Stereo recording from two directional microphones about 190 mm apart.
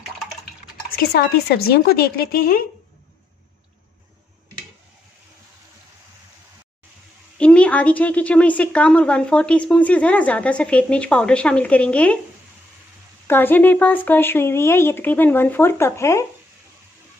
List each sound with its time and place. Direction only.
0.8 s speech: 55° left (ahead or behind)
7.3 s a woman's voice: 5° left (ahead or behind)
13.3 s a woman's voice: 10° left (ahead or behind)